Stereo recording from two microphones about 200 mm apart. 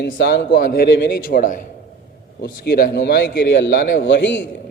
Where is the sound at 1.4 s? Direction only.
40° left (ahead or behind).